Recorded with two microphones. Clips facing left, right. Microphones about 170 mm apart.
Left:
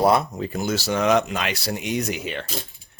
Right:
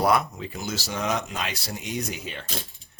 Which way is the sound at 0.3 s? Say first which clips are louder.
Left 7 dB; 45° left (ahead or behind).